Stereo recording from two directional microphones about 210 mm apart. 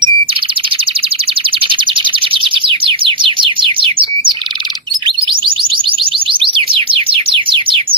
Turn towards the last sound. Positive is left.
turn(degrees=-25)  # may be behind; listen again after turning